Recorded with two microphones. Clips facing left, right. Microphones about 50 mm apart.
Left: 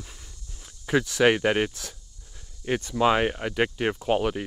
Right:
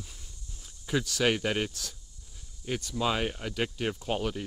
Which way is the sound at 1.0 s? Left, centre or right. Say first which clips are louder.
Left 7 dB; left.